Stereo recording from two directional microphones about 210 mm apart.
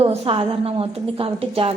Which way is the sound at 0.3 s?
25° right (ahead or behind).